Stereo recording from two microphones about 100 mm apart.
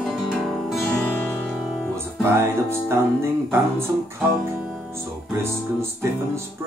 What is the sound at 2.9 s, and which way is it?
Speech, 25° right (ahead or behind).